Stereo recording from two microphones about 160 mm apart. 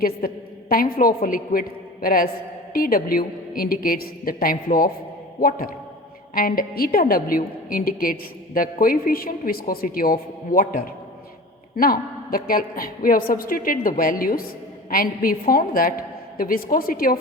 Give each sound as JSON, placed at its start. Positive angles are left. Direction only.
{"t": 0.2, "sound": "a woman's voice", "side_deg": 65}